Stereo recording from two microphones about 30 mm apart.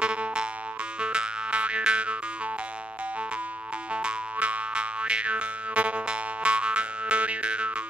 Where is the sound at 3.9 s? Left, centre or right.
Right.